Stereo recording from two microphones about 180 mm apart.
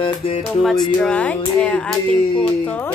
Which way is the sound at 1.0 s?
10° left (ahead or behind).